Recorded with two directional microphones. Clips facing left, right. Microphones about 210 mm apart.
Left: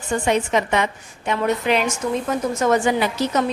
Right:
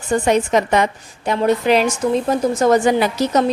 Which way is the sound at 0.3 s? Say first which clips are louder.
Right 3 dB; 40° right (ahead or behind).